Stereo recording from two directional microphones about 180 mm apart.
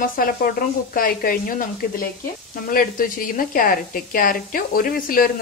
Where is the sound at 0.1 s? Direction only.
55° left (ahead or behind).